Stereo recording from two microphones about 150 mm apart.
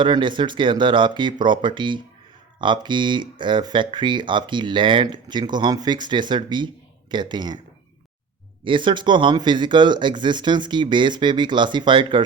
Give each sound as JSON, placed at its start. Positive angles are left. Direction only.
{"t": 0.0, "sound": "speech", "side_deg": -30}
{"t": 8.6, "sound": "speech", "side_deg": -35}